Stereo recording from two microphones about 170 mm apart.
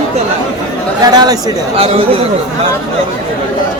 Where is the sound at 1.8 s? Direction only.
35° right (ahead or behind).